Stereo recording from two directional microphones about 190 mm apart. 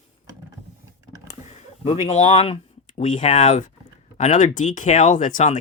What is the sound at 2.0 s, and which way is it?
Speech, 35° left (ahead or behind).